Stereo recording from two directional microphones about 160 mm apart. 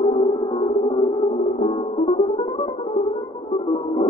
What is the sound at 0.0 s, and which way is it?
Music, 30° left (ahead or behind).